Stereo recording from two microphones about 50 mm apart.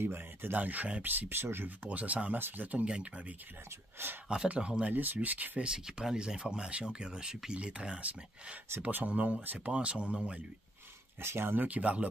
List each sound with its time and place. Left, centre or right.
0.0 s speech: right
0.6 s speech: right
1.0 s speech: right
1.9 s speech: right
2.3 s speech: right
4.0 s speech: right
4.5 s speech: right
4.9 s speech: right
5.6 s speech: centre
11.1 s speech: right
11.6 s speech: right